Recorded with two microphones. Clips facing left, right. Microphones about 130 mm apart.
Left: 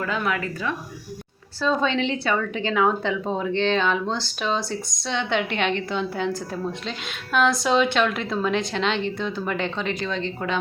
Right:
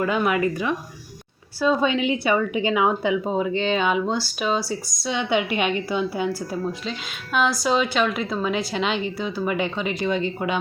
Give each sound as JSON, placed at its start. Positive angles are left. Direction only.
{"t": 0.0, "sound": "a woman's voice", "side_deg": -20}